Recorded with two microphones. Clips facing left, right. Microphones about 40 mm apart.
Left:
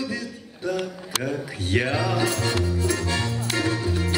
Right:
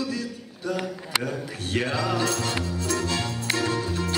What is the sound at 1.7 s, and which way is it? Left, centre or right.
Music, centre.